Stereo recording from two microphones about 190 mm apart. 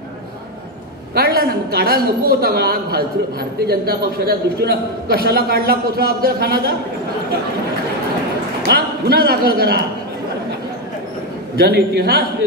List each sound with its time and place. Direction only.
1.1 s a woman's voice: 55° right (ahead or behind)
8.6 s a woman's voice: 55° right (ahead or behind)
11.5 s a man's voice: 55° right (ahead or behind)